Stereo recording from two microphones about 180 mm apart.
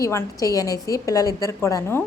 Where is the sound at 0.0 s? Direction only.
15° left (ahead or behind).